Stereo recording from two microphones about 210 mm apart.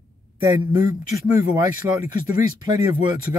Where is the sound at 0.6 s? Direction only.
15° right (ahead or behind).